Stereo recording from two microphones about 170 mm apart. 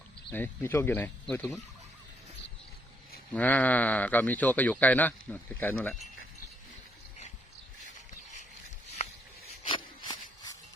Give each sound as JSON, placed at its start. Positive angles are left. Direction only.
{"t": 0.3, "sound": "speech", "side_deg": 10}
{"t": 3.3, "sound": "speech", "side_deg": 10}
{"t": 9.6, "sound": "a sound", "side_deg": 25}